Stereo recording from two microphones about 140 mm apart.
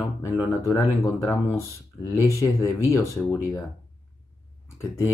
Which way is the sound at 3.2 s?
10° left (ahead or behind).